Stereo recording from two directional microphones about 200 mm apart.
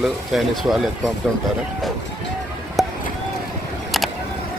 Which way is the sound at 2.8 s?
Centre (ahead or behind).